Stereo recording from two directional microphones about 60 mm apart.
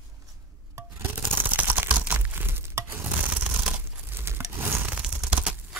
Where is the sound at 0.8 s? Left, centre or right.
Right.